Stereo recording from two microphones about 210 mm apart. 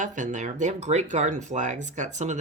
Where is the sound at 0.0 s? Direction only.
35° right (ahead or behind).